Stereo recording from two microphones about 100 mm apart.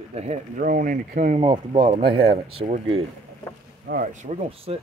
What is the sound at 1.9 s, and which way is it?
Speech, 75° right (ahead or behind).